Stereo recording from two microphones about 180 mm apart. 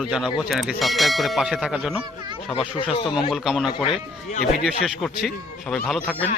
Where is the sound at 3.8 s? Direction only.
30° left (ahead or behind).